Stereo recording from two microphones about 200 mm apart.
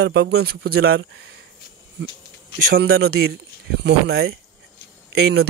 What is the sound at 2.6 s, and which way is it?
A man's voice, 50° right (ahead or behind).